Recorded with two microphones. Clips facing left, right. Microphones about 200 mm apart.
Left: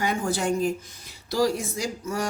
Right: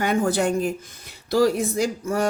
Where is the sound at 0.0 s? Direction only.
60° right (ahead or behind).